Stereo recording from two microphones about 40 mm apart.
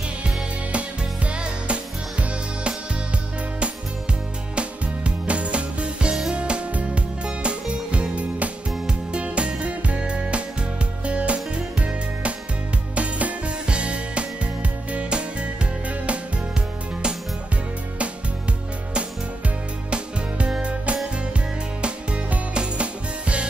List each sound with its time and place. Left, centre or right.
0.2 s music: right
4.6 s music: right
19.9 s music: right
21.8 s music: right